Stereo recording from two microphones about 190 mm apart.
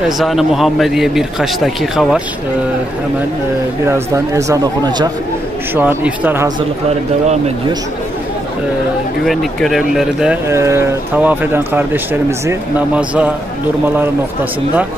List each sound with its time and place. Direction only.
0.2 s a man's voice: centre (ahead or behind)
3.8 s speech: 15° right (ahead or behind)
5.8 s speech: 10° right (ahead or behind)
9.2 s speech: centre (ahead or behind)